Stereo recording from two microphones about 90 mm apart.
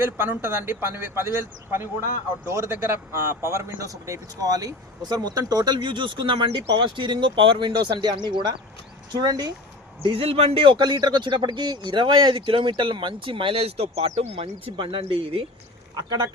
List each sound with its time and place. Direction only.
0.0 s a man's voice: 25° right (ahead or behind); by 9.5 s 45° right (ahead or behind)
10.1 s speech: 90° right
16.0 s speech: 50° right (ahead or behind)